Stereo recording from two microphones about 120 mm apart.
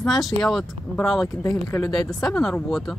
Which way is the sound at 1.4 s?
30° left (ahead or behind).